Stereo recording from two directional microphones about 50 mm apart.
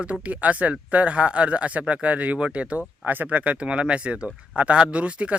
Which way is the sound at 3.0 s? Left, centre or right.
Right.